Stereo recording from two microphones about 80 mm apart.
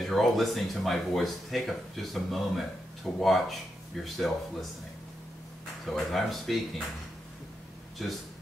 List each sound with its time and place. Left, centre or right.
0.0 s speech: centre
5.9 s speech: centre
8.0 s speech: centre